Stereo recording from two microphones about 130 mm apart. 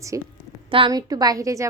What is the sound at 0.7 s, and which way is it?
Speech, 40° right (ahead or behind).